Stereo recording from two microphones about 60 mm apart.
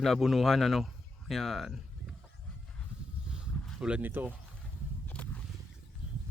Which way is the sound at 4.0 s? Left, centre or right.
Right.